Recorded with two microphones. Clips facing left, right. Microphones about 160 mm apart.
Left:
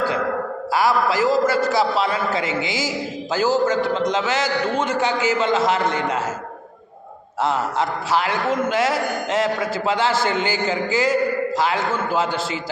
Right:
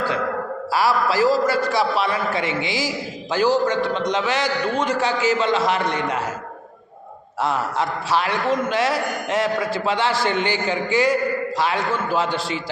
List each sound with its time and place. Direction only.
0.7 s a man's voice: 20° left (ahead or behind)
7.4 s a man's voice: 20° left (ahead or behind)